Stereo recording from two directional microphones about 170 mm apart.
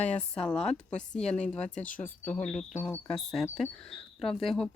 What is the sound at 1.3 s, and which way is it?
Speech, 5° left (ahead or behind).